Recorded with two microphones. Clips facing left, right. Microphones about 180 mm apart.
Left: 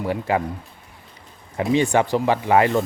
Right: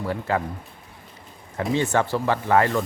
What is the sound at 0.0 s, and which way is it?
Speech, 15° left (ahead or behind).